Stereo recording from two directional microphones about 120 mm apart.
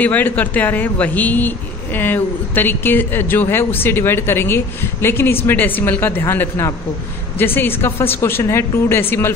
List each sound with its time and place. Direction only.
0.0 s a man's voice: 15° left (ahead or behind)